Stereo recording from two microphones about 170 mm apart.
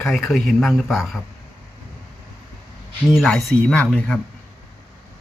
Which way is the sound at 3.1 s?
Centre (ahead or behind).